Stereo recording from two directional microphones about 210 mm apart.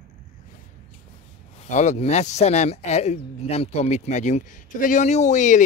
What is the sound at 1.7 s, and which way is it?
Speech, 35° left (ahead or behind).